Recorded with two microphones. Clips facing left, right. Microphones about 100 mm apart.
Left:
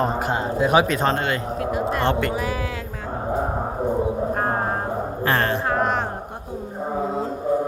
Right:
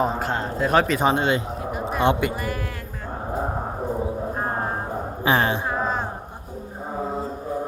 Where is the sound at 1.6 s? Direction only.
90° left.